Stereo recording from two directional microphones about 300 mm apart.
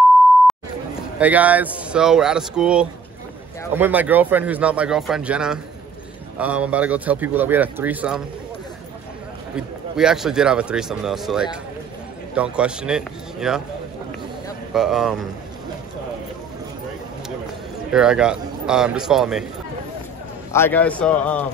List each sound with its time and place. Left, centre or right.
1.2 s speech: centre
9.6 s speech: centre
14.7 s speech: centre
17.9 s speech: centre
20.5 s speech: centre